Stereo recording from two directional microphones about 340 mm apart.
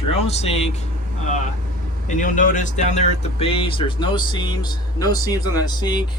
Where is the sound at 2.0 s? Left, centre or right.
Left.